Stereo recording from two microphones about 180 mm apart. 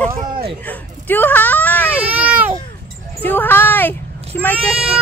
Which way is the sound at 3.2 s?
10° left (ahead or behind).